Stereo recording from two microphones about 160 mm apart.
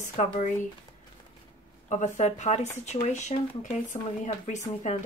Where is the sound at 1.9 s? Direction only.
50° left (ahead or behind).